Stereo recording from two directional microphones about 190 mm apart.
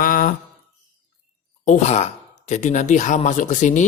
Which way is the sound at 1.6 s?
40° left (ahead or behind).